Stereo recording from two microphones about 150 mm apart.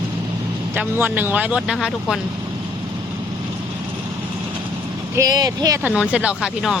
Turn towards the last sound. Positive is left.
turn(degrees=-5)  # may be behind; listen again after turning